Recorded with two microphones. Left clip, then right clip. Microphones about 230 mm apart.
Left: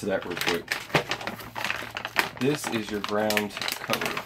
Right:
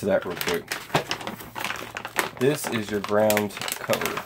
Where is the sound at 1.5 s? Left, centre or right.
Right.